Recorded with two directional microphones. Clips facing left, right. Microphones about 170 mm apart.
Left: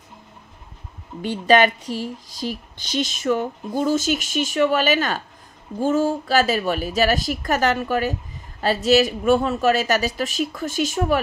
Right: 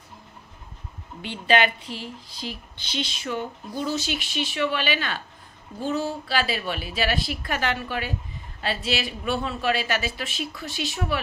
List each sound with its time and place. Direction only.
1.2 s a woman's voice: 45° left (ahead or behind)